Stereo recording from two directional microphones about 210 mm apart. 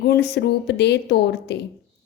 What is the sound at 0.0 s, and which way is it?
A woman's voice, 50° left (ahead or behind).